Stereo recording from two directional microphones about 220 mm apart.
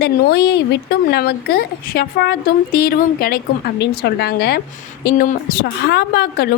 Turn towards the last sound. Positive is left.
turn(degrees=45)  # may be behind; listen again after turning